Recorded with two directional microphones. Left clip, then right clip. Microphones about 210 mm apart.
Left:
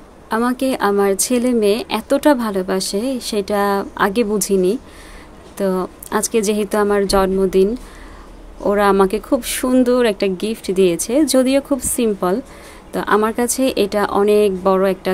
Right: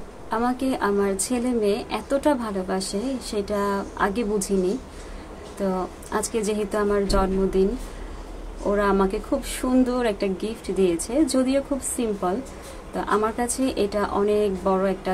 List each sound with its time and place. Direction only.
0.3 s a woman's voice: 45° left (ahead or behind)
8.6 s a woman's voice: 45° left (ahead or behind)